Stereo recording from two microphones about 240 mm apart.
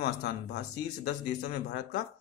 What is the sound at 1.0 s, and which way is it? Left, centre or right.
A man's voice, left.